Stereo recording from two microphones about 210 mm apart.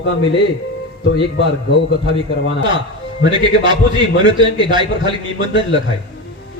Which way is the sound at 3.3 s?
20° right (ahead or behind).